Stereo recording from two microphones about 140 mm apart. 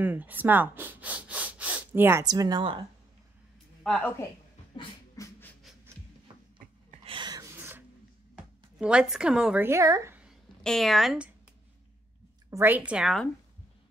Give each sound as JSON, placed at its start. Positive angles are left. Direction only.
{"t": 0.0, "sound": "speech", "side_deg": -15}
{"t": 2.2, "sound": "a woman's voice", "side_deg": -30}
{"t": 3.8, "sound": "a woman's voice", "side_deg": 5}
{"t": 5.1, "sound": "scratch", "side_deg": 25}
{"t": 7.1, "sound": "gasp", "side_deg": -30}
{"t": 7.5, "sound": "cough", "side_deg": -15}
{"t": 8.7, "sound": "a woman's voice", "side_deg": -5}
{"t": 9.6, "sound": "a woman's voice", "side_deg": -20}
{"t": 10.6, "sound": "a woman's voice", "side_deg": 0}
{"t": 12.4, "sound": "speech", "side_deg": -15}